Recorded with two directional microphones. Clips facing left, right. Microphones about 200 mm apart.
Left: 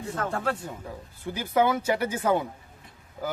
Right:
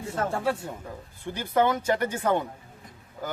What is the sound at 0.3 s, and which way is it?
Speech, 10° right (ahead or behind).